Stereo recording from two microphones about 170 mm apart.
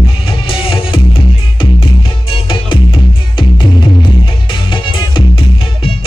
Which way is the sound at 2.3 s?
30° left (ahead or behind).